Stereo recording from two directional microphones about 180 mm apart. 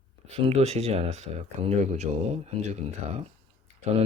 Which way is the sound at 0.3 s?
35° right (ahead or behind).